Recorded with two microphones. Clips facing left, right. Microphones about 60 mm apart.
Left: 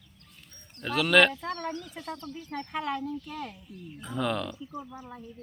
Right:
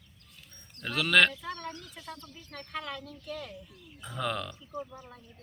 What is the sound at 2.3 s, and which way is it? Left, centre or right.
Speech, centre.